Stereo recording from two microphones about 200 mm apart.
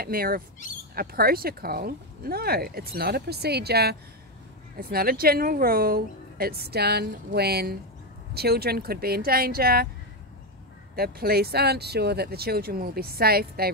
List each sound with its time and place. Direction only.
0.0 s speech: 50° right (ahead or behind)
11.0 s speech: 50° right (ahead or behind)